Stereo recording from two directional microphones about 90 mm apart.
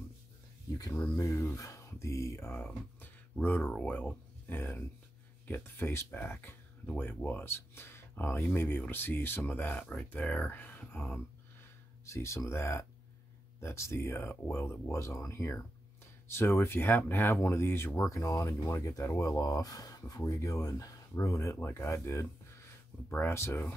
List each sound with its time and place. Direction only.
0.7 s a sound: 40° left (ahead or behind)
1.1 s speech: 35° left (ahead or behind); by 11.1 s 20° left (ahead or behind)
12.1 s speech: 35° left (ahead or behind)